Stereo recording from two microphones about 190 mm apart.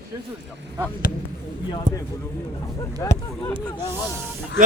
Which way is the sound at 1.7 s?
20° left (ahead or behind).